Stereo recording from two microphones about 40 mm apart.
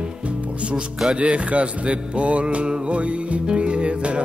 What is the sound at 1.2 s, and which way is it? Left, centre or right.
Music, right.